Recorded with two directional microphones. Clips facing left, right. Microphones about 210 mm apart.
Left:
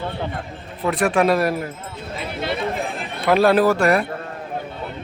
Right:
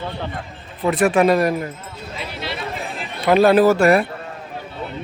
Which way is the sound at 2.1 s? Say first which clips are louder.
Left 4 dB; 50° left (ahead or behind).